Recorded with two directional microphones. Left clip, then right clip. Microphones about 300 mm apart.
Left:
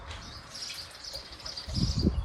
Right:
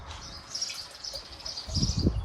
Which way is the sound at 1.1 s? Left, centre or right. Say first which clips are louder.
Right 1 dB; centre.